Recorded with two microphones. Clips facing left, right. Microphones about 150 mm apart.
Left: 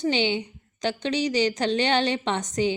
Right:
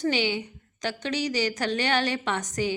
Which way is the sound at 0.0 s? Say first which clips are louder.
Left 2 dB; 25° left (ahead or behind).